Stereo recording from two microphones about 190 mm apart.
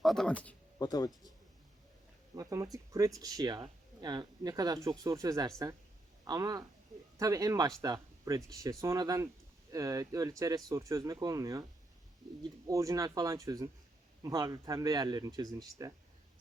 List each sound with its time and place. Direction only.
0.0 s speech: centre (ahead or behind)
0.8 s speech: 20° left (ahead or behind)
2.3 s speech: 15° right (ahead or behind)